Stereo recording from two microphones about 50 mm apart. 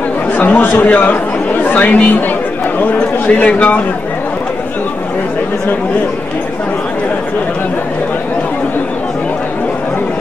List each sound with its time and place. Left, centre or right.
0.4 s speech: left